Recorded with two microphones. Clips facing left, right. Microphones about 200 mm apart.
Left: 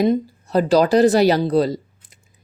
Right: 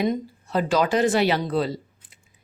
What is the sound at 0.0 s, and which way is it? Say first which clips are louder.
Speech: left 6 dB; 40° left (ahead or behind).